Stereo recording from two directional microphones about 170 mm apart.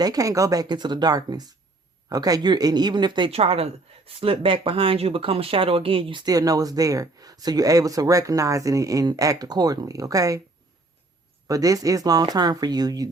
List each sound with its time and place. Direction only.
0.0 s speech: 20° right (ahead or behind)
11.4 s speech: 20° right (ahead or behind)